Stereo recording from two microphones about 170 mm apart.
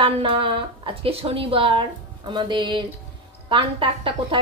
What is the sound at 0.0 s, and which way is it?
A woman's voice, 30° right (ahead or behind).